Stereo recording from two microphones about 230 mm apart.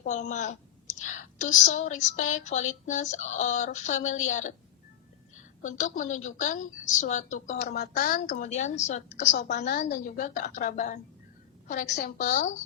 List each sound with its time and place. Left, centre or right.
0.0 s speech: left
5.6 s speech: left